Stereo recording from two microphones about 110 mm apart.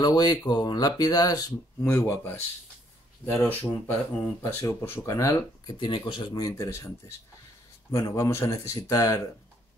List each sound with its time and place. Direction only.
0.0 s speech: 35° left (ahead or behind)
1.9 s a man's voice: 20° left (ahead or behind)
5.8 s speech: 50° left (ahead or behind)
6.4 s a man's voice: 25° left (ahead or behind)